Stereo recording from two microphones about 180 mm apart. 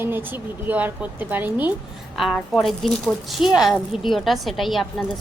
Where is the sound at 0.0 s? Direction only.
10° right (ahead or behind).